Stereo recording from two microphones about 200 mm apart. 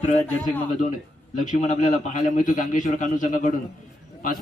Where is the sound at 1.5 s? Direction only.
35° left (ahead or behind).